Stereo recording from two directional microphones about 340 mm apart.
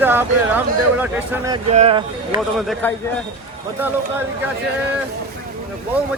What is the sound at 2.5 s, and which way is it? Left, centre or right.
Speech, centre.